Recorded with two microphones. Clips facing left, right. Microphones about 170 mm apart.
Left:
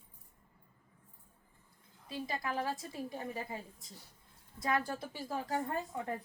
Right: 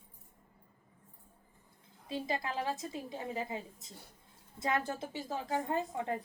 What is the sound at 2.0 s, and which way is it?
A woman's voice, 25° right (ahead or behind).